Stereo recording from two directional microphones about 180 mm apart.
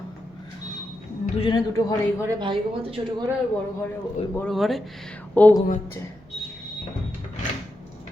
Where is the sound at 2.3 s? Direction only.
25° right (ahead or behind).